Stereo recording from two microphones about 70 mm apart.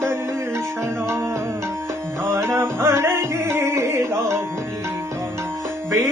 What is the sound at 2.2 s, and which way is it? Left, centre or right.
Music, right.